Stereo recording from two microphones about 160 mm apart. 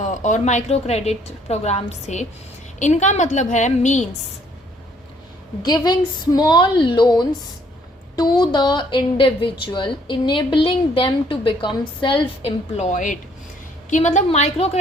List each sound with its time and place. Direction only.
0.0 s a woman's voice: 50° left (ahead or behind)
5.6 s a woman's voice: 25° left (ahead or behind); by 14.8 s 40° left (ahead or behind)